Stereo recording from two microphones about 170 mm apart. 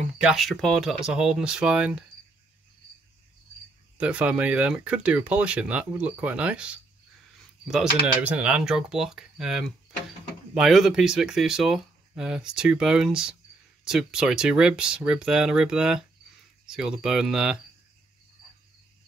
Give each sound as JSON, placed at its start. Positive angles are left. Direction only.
{"t": 0.2, "sound": "speech", "side_deg": 0}
{"t": 4.0, "sound": "speech", "side_deg": -5}